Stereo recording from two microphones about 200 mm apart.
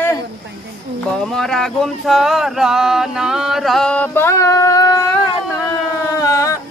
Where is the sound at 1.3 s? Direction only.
Centre (ahead or behind); by 5.0 s 20° left (ahead or behind).